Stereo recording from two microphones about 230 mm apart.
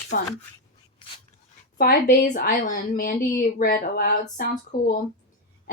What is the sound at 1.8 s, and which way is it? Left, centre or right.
A woman's voice, left.